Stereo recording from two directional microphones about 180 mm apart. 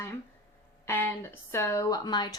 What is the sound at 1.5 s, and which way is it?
Speech, 15° left (ahead or behind).